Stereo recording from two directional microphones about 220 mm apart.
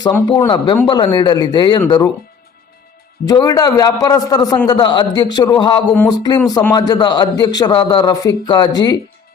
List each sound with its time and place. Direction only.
0.3 s a man's voice: 20° left (ahead or behind)
3.2 s a man's voice: 15° left (ahead or behind)